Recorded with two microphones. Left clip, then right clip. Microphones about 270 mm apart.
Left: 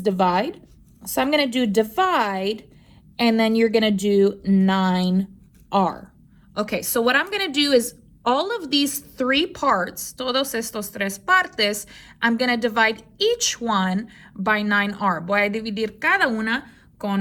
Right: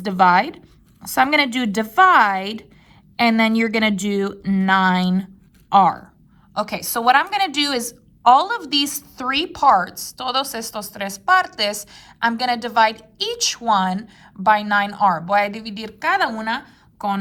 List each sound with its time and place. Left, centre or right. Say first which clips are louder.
0.0 s speech: right 5 dB; right
6.5 s a woman's voice: right 1 dB; centre